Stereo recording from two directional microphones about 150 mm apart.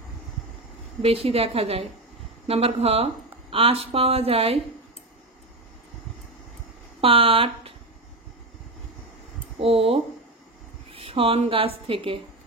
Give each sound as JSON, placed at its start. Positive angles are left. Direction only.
{"t": 1.0, "sound": "speech", "side_deg": -40}
{"t": 7.0, "sound": "speech", "side_deg": -40}
{"t": 9.6, "sound": "a woman's voice", "side_deg": -40}